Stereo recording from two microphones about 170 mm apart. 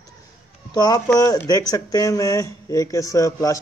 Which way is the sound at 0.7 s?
25° left (ahead or behind).